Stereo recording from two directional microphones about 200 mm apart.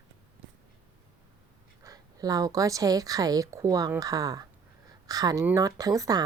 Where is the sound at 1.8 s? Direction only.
15° right (ahead or behind).